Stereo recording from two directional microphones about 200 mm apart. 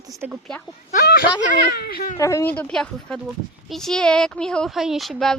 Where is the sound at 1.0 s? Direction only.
50° left (ahead or behind).